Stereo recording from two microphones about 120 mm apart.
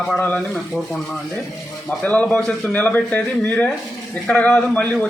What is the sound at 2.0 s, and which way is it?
A man's voice, 15° left (ahead or behind).